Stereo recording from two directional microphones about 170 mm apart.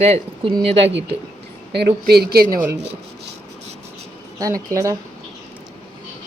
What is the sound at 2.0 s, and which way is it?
Speech, 70° right (ahead or behind).